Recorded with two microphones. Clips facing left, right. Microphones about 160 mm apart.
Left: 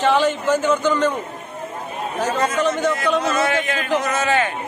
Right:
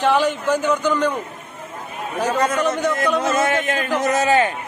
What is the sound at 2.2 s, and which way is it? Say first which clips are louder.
A man's voice: right 1 dB; 10° right (ahead or behind).